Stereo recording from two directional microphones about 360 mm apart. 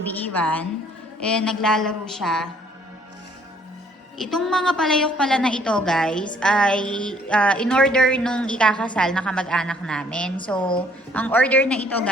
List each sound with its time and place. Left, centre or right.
0.0 s a woman's voice: centre
4.2 s a woman's voice: centre